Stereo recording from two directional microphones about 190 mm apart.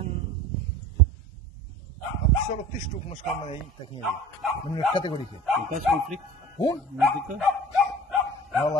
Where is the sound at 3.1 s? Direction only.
25° left (ahead or behind).